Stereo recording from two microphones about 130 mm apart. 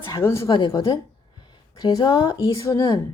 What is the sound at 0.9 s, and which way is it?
Speech, 35° left (ahead or behind).